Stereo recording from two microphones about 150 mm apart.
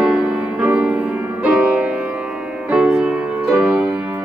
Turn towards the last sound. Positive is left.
turn(degrees=-5)  # may be behind; listen again after turning